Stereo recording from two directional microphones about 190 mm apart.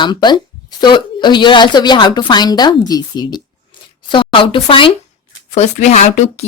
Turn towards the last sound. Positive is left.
turn(degrees=40)  # may be behind; listen again after turning